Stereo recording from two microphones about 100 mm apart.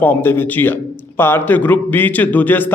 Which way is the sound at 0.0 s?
20° left (ahead or behind).